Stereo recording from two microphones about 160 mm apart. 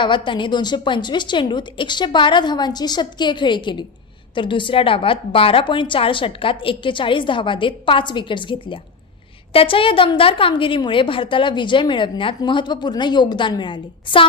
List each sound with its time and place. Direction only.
0.0 s a woman's voice: 30° left (ahead or behind)